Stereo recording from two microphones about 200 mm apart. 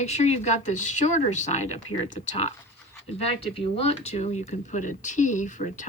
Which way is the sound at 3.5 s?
30° left (ahead or behind).